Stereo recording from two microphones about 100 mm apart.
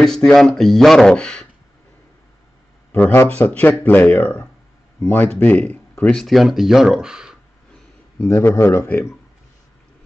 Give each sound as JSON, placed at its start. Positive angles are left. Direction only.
{"t": 0.0, "sound": "speech", "side_deg": 5}
{"t": 2.9, "sound": "speech", "side_deg": 20}
{"t": 6.1, "sound": "speech", "side_deg": 0}
{"t": 8.2, "sound": "speech", "side_deg": 25}